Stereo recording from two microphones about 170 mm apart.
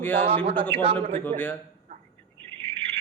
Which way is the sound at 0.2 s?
35° right (ahead or behind).